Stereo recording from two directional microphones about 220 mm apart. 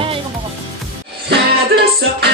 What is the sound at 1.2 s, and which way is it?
Music, 50° right (ahead or behind).